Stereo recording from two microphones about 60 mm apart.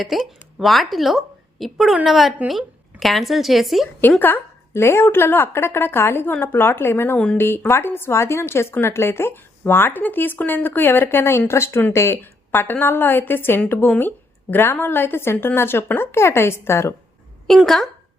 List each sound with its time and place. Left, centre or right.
0.0 s a woman's voice: centre
4.2 s a sound: left
4.8 s a woman's voice: left
17.5 s a woman's voice: centre